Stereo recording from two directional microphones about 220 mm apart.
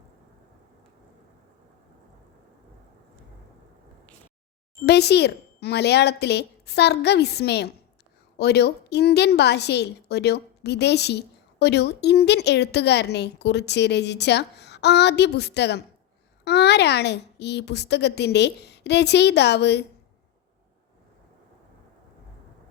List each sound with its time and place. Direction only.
4.9 s a woman's voice: 50° left (ahead or behind)